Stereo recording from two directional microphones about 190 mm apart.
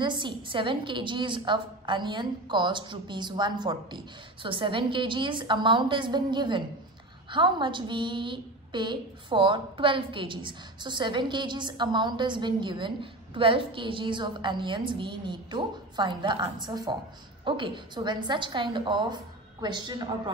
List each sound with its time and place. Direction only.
0.0 s a woman's voice: 25° right (ahead or behind)